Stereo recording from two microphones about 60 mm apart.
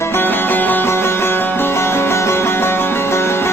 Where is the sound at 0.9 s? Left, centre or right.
Left.